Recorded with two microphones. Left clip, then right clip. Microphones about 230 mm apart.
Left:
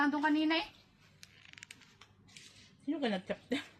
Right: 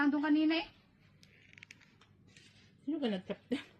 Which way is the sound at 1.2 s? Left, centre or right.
Left.